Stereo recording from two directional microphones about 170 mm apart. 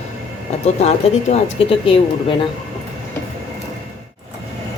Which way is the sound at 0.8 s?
35° left (ahead or behind).